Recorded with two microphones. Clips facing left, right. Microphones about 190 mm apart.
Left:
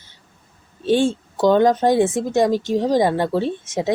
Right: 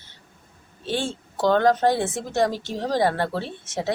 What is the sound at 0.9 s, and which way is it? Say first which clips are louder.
Speech: left 10 dB; 15° left (ahead or behind).